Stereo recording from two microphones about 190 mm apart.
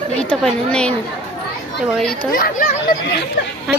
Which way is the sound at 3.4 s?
60° left (ahead or behind).